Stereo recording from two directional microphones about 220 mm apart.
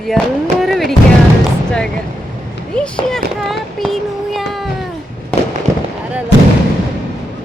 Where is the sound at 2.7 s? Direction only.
5° left (ahead or behind).